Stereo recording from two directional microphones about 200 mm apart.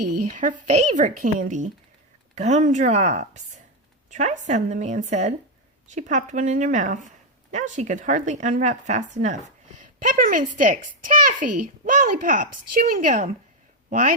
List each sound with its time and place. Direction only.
0.3 s a child's voice: 40° right (ahead or behind)